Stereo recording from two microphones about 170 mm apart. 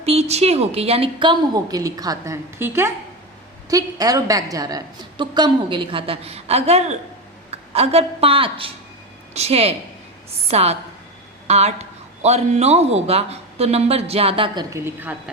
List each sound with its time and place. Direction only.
0.0 s a woman's voice: 40° right (ahead or behind); by 15.1 s 15° right (ahead or behind)